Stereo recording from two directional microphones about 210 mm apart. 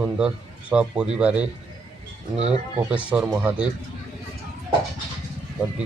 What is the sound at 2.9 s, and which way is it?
Speech, 5° right (ahead or behind).